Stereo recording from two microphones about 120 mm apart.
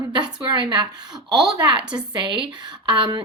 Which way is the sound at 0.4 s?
40° right (ahead or behind).